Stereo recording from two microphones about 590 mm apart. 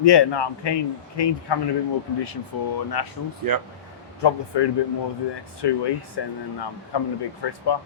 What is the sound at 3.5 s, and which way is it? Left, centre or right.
Speech, right.